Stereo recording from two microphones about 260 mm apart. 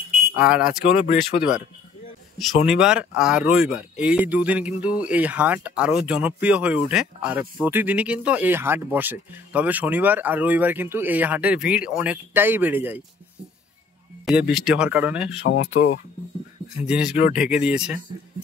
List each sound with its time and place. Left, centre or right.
0.4 s speech: centre
1.3 s speech: left
2.3 s speech: centre
14.2 s speech: centre
15.5 s speech: left
16.8 s speech: centre